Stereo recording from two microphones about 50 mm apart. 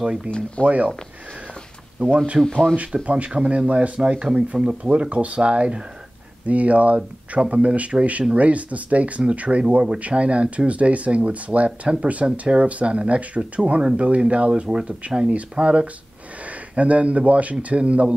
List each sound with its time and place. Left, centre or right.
0.0 s speech: centre
0.6 s speech: left
2.0 s speech: right
2.4 s speech: centre
2.7 s speech: right
5.1 s speech: right